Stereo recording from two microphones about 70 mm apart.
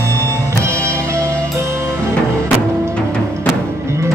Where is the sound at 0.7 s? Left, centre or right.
Right.